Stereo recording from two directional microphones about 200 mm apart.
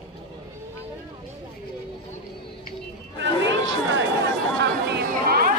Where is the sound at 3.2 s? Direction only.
65° right (ahead or behind).